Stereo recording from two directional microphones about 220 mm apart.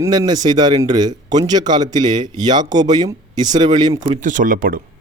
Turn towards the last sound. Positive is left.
turn(degrees=-40)  # may be behind; listen again after turning